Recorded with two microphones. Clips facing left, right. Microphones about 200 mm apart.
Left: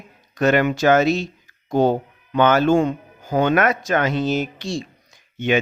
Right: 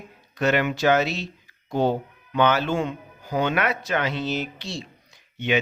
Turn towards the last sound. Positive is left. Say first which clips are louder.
# left 4 dB
turn(degrees=45)  # may be behind; listen again after turning